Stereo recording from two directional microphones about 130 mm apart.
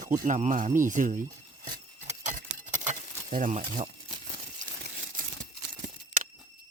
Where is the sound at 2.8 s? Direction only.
80° right.